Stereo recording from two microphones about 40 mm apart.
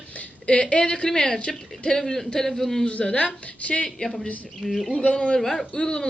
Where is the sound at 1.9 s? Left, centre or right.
Centre.